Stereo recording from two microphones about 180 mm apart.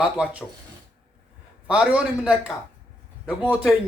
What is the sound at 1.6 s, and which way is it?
A man's voice, 5° right (ahead or behind).